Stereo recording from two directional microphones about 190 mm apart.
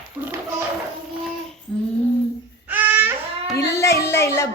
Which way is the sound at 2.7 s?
10° right (ahead or behind).